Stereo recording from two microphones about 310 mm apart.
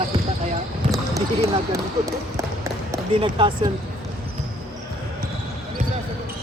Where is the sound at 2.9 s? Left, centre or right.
Centre.